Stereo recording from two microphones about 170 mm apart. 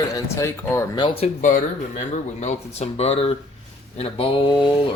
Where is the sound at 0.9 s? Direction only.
30° left (ahead or behind).